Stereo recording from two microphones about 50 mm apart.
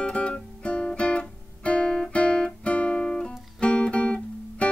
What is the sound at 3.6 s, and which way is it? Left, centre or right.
Music, centre.